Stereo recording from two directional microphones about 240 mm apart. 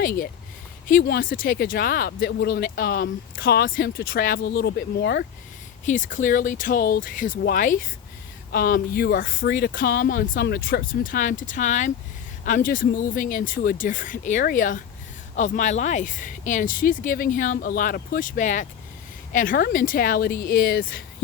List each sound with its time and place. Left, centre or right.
0.9 s speech: left